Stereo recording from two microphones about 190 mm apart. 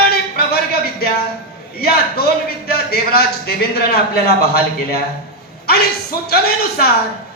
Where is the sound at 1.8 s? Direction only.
55° left (ahead or behind).